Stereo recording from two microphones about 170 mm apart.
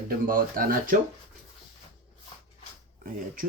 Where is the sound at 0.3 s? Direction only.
55° right (ahead or behind).